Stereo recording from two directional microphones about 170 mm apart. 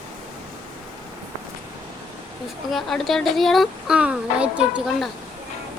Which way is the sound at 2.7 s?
Centre (ahead or behind).